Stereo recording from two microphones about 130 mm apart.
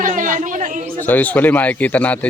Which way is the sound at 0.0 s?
85° right.